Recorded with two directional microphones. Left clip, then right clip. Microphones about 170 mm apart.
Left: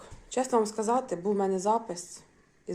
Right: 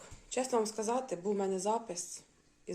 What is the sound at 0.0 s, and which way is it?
A woman's voice, centre (ahead or behind).